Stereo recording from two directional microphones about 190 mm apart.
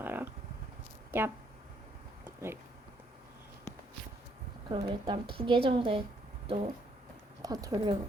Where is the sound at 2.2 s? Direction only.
10° right (ahead or behind).